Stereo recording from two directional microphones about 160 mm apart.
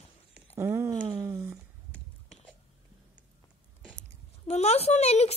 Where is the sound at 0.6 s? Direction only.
15° right (ahead or behind).